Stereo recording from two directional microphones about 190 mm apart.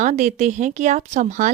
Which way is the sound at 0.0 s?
40° right (ahead or behind).